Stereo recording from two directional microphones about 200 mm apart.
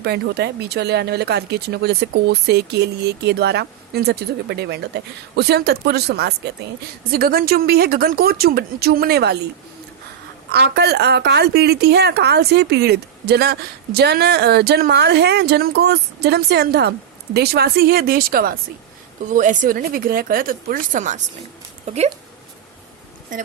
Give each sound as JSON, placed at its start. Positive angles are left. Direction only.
{"t": 0.0, "sound": "a woman's voice", "side_deg": -55}
{"t": 10.5, "sound": "a woman's voice", "side_deg": -55}